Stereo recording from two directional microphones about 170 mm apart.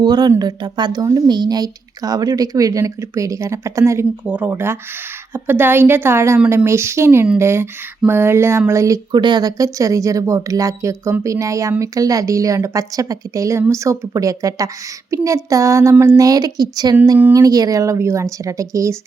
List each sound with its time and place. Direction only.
0.0 s a woman's voice: 25° right (ahead or behind)
17.0 s a woman's voice: 10° right (ahead or behind)